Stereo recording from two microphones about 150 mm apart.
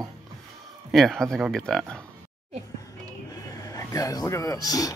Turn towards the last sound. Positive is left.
turn(degrees=25)  # may be behind; listen again after turning